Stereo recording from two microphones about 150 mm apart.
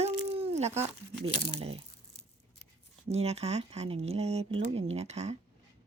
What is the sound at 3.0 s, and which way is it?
Speech, 45° right (ahead or behind).